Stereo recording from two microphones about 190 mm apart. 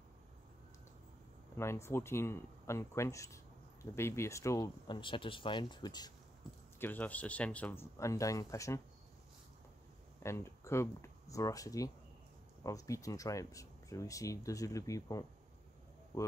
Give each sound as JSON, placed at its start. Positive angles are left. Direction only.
{"t": 1.6, "sound": "speech", "side_deg": 15}
{"t": 6.8, "sound": "speech", "side_deg": 10}
{"t": 10.2, "sound": "speech", "side_deg": 15}